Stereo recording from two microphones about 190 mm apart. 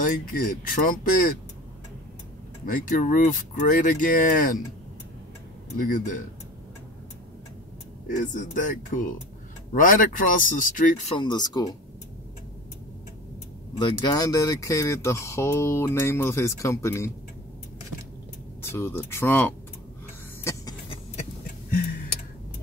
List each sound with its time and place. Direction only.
0.0 s speech: 45° left (ahead or behind)
2.6 s speech: 45° left (ahead or behind)
5.8 s speech: 45° left (ahead or behind)
8.2 s speech: 45° left (ahead or behind)
11.1 s speech: 25° left (ahead or behind)
13.7 s speech: 25° left (ahead or behind)
18.6 s speech: 10° left (ahead or behind)